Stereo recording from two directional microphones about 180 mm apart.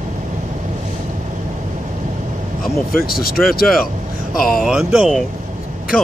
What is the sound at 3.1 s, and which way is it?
Speech, 55° left (ahead or behind).